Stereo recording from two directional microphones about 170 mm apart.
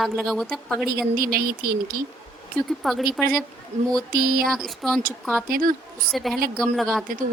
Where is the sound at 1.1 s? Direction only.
60° right (ahead or behind).